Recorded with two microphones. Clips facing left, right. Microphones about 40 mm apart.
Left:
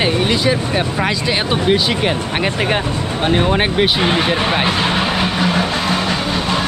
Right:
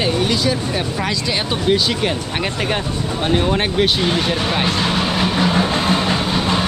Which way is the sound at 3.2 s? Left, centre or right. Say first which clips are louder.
Left 2 dB; centre.